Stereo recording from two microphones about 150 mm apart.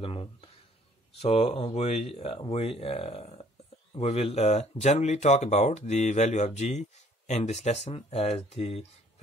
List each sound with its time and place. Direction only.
0.0 s speech: 40° left (ahead or behind)